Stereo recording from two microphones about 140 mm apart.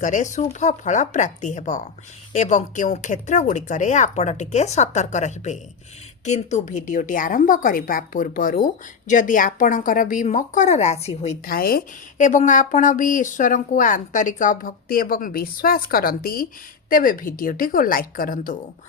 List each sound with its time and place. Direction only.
0.0 s a woman's voice: 60° left (ahead or behind)
11.4 s a woman's voice: 90° left
16.9 s a woman's voice: 80° left